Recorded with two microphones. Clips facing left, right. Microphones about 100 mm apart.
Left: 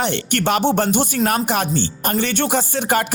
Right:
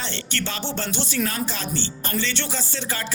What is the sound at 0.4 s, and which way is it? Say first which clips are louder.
Speech: left 14 dB; 55° left (ahead or behind).